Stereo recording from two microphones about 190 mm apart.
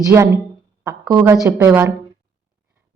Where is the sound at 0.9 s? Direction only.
20° right (ahead or behind).